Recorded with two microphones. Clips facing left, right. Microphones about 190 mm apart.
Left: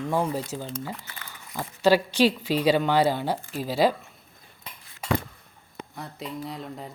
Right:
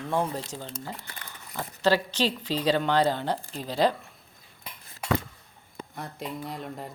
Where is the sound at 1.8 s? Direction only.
10° left (ahead or behind).